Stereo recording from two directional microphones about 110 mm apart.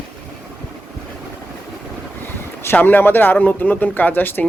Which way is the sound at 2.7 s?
20° left (ahead or behind).